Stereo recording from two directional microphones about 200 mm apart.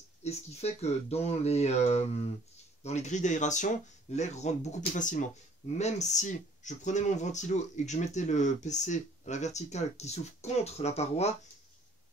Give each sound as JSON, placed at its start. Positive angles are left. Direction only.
{"t": 0.2, "sound": "speech", "side_deg": 30}